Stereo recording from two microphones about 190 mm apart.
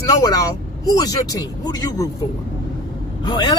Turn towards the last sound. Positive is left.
turn(degrees=20)  # may be behind; listen again after turning